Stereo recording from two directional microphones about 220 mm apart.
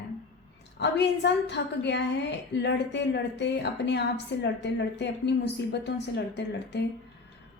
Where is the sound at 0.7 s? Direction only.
50° left (ahead or behind).